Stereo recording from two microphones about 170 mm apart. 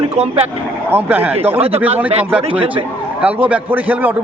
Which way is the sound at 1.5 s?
35° right (ahead or behind).